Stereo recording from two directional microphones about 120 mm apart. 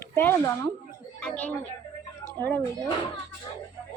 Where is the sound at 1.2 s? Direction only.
10° left (ahead or behind).